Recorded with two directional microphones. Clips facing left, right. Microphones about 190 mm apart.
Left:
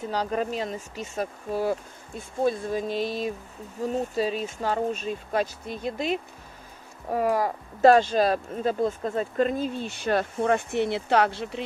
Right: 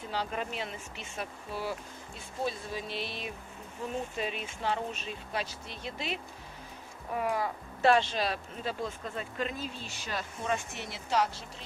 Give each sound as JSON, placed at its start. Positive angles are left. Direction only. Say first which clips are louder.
{"t": 0.1, "sound": "speech", "louder": "left 7 dB", "side_deg": 40}